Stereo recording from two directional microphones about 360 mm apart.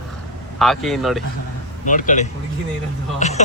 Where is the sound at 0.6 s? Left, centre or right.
Centre.